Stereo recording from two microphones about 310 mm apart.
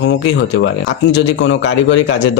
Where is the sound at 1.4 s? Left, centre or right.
Left.